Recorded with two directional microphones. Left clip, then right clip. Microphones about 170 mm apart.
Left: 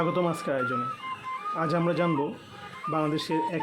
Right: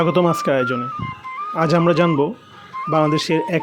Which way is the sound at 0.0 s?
45° right (ahead or behind).